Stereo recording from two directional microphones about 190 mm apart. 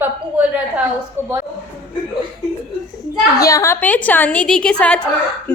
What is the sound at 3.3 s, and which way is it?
A woman's voice, 15° left (ahead or behind).